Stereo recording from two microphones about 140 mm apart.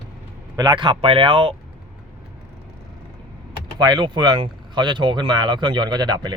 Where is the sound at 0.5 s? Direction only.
30° right (ahead or behind).